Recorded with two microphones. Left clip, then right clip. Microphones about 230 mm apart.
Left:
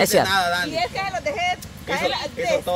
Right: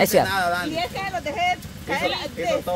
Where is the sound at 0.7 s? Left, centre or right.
Centre.